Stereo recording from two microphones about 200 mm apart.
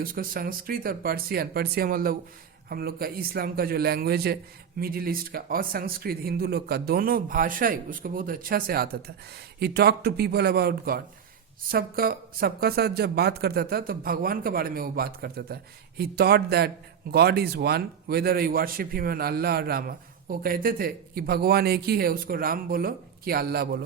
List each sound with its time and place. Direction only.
0.0 s a man's voice: 45° right (ahead or behind)